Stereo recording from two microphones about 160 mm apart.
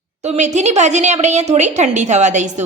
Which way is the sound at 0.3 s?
45° right (ahead or behind).